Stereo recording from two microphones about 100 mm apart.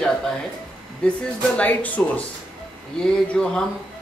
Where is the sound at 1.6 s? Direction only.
15° left (ahead or behind).